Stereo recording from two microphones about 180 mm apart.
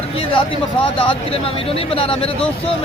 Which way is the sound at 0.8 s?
30° left (ahead or behind).